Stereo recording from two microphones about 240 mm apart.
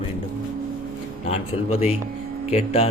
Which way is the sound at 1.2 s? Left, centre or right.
Left.